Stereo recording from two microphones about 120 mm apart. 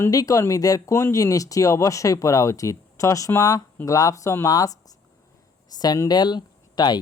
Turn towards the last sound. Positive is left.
turn(degrees=35)  # may be behind; listen again after turning